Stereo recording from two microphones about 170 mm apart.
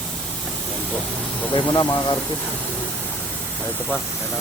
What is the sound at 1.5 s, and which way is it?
Speech, 25° left (ahead or behind).